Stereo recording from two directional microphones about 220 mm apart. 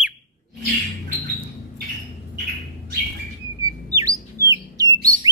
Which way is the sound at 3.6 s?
15° right (ahead or behind).